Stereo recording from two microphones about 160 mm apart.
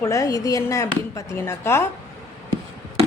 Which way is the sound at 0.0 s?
20° left (ahead or behind).